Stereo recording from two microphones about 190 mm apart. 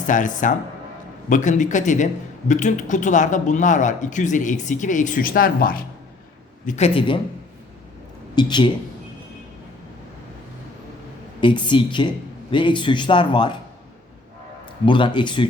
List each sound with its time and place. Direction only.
0.1 s speech: 45° left (ahead or behind)
6.7 s speech: 35° left (ahead or behind)
8.4 s speech: 25° left (ahead or behind)
11.3 s speech: 25° left (ahead or behind)
14.8 s speech: 25° left (ahead or behind)